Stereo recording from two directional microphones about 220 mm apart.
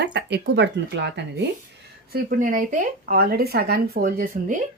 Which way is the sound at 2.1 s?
40° right (ahead or behind).